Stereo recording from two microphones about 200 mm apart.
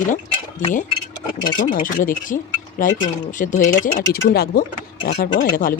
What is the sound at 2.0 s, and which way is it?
Speech, 40° left (ahead or behind).